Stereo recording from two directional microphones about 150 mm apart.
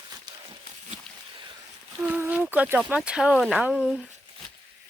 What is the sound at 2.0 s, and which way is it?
Speech, 10° right (ahead or behind).